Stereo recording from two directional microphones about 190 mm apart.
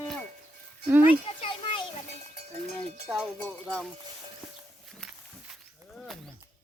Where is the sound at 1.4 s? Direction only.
25° left (ahead or behind).